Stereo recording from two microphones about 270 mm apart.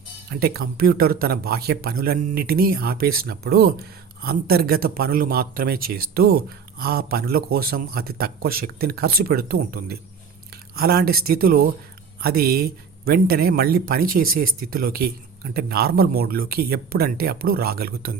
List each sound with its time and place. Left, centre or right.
0.3 s speech: right